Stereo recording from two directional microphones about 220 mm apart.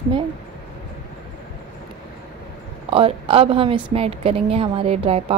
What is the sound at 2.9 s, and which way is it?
A woman's voice, 25° right (ahead or behind).